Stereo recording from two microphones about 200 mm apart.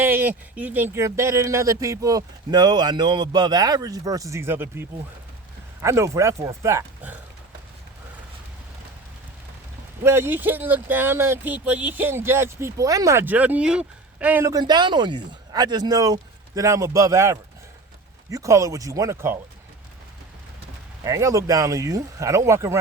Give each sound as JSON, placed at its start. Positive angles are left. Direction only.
{"t": 0.0, "sound": "speech", "side_deg": -10}
{"t": 10.0, "sound": "speech", "side_deg": -10}
{"t": 21.0, "sound": "speech", "side_deg": -15}